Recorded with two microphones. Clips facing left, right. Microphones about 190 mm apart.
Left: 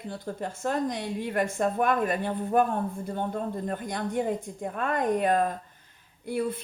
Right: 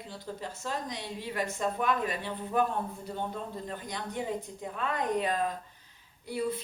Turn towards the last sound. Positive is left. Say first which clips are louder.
# left 3 dB
turn(degrees=50)  # may be behind; listen again after turning